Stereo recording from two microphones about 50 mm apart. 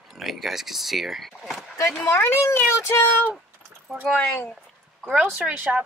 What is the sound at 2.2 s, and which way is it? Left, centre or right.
Speech, left.